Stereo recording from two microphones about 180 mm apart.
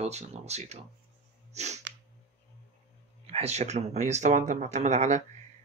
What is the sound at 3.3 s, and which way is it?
Speech, 35° right (ahead or behind).